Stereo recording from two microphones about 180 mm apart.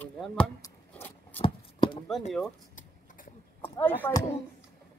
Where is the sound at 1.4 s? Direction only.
30° left (ahead or behind).